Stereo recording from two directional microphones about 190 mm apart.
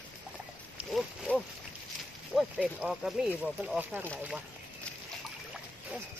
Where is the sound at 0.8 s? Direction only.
Centre (ahead or behind).